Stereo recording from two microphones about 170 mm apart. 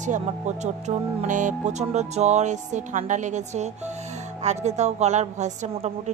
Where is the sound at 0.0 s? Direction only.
45° right (ahead or behind).